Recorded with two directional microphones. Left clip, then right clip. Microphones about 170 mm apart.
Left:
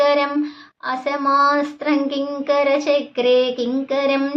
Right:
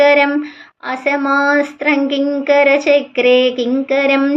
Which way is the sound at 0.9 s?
15° right (ahead or behind).